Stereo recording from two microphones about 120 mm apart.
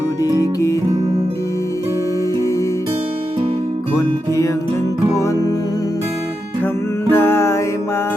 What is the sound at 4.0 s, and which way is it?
Music, 25° left (ahead or behind).